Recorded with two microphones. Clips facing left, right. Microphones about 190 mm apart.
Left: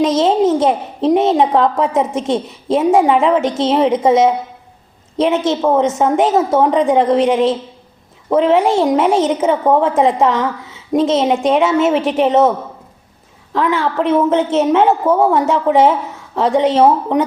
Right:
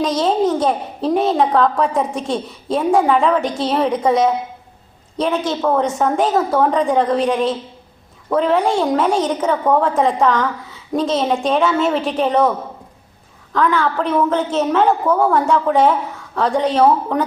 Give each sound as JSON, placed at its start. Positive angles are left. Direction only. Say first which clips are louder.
{"t": 0.0, "sound": "a woman's voice", "louder": "left 4 dB", "side_deg": 25}